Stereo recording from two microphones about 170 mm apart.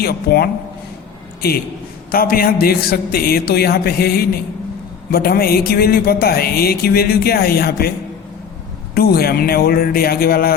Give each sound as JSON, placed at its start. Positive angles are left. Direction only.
{"t": 0.0, "sound": "speech", "side_deg": 65}
{"t": 2.0, "sound": "speech", "side_deg": 60}
{"t": 9.0, "sound": "speech", "side_deg": 65}